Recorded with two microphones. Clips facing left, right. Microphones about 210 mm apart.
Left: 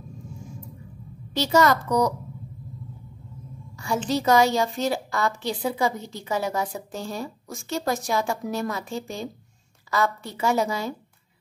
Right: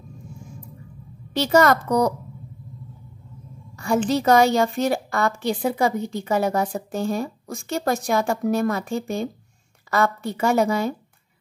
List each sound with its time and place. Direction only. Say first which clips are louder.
1.3 s a woman's voice: right 3 dB; 55° right (ahead or behind)
3.7 s a woman's voice: right 4 dB; 55° right (ahead or behind)